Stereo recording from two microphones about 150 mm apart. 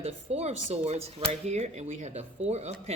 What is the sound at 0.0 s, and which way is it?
A man's voice, 45° right (ahead or behind).